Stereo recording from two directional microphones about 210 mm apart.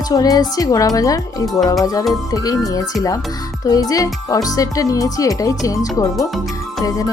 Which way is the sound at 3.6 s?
15° left (ahead or behind).